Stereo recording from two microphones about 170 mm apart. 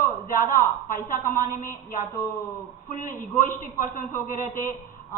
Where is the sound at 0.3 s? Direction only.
55° left (ahead or behind).